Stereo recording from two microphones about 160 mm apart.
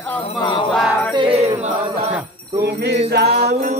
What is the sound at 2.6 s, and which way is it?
Jingle bell, 90° right.